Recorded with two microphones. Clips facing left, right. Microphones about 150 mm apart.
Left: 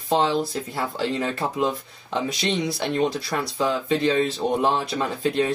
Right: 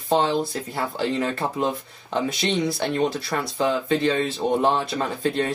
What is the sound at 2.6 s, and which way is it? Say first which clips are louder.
Speech: right 1 dB; centre (ahead or behind).